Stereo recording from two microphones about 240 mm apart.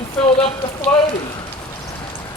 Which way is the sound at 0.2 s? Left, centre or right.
Centre.